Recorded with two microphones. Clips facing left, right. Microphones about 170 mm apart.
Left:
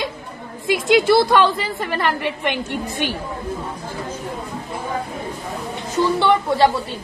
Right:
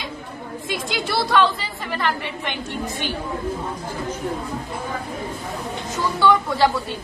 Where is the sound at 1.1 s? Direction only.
55° left (ahead or behind).